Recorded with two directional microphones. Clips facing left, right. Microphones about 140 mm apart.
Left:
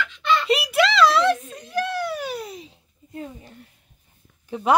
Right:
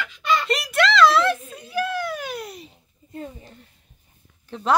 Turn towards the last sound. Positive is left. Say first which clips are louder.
# left 2 dB
turn(degrees=10)  # may be behind; listen again after turning